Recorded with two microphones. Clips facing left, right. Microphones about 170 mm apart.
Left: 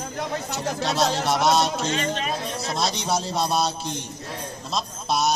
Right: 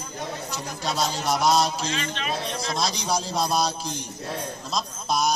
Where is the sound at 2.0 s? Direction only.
40° left (ahead or behind).